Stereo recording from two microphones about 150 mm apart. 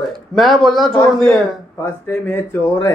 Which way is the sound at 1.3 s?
20° left (ahead or behind).